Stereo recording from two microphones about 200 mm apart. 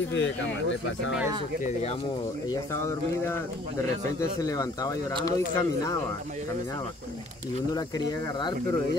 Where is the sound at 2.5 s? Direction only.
15° left (ahead or behind).